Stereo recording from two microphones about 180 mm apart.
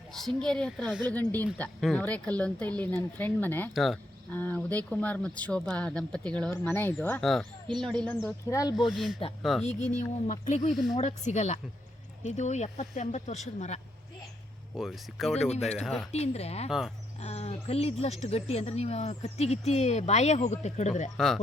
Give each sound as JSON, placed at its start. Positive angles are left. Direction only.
{"t": 0.1, "sound": "a woman's voice", "side_deg": 0}
{"t": 1.1, "sound": "speech", "side_deg": 10}
{"t": 3.7, "sound": "a woman's voice", "side_deg": 0}
{"t": 8.4, "sound": "speech", "side_deg": 20}
{"t": 8.7, "sound": "a woman's voice", "side_deg": 0}
{"t": 9.6, "sound": "speech", "side_deg": 40}
{"t": 14.8, "sound": "a woman's voice", "side_deg": 0}
{"t": 15.4, "sound": "speech", "side_deg": 35}
{"t": 15.8, "sound": "a woman's voice", "side_deg": 0}
{"t": 16.1, "sound": "speech", "side_deg": 35}
{"t": 16.6, "sound": "a woman's voice", "side_deg": 0}
{"t": 17.2, "sound": "speech", "side_deg": 35}